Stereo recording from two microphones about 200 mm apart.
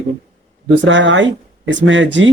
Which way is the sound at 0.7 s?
65° right (ahead or behind).